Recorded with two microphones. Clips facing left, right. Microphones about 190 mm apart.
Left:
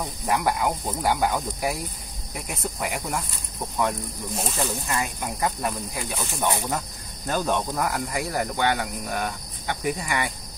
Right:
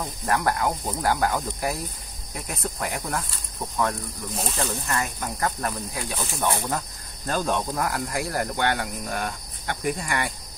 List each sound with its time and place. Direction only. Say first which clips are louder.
0.0 s cricket: even; 5° left (ahead or behind)
2.3 s speech: even; 5° left (ahead or behind)
6.4 s speech: even; 15° left (ahead or behind)
7.2 s cricket: even; 5° left (ahead or behind)